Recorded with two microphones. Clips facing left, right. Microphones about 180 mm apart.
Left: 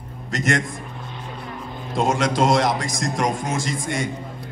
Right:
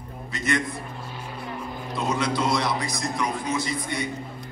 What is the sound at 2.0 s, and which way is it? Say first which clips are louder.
Speech: left 5 dB; 90° left.